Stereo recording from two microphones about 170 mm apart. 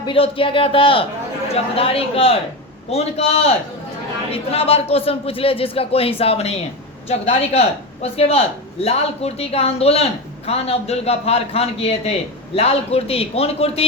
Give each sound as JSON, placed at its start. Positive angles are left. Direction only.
{"t": 0.1, "sound": "a man's voice", "side_deg": 30}